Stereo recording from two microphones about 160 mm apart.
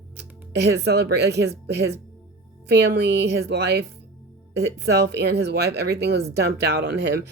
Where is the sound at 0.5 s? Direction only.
90° right.